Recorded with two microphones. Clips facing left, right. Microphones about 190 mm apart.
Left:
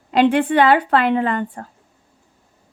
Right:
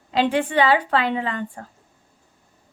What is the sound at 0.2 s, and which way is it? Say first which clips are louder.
A woman's voice: left 5 dB; 60° left (ahead or behind).